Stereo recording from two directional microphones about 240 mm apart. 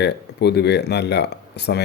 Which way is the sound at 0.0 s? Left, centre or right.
Left.